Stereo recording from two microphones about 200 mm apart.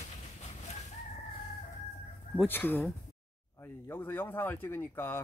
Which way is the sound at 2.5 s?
10° left (ahead or behind).